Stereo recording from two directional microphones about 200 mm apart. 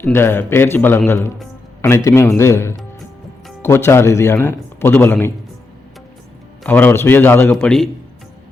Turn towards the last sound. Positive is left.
turn(degrees=5)  # may be behind; listen again after turning